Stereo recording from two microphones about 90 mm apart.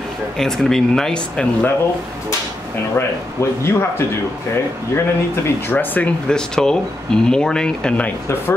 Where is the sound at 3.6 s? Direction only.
25° left (ahead or behind).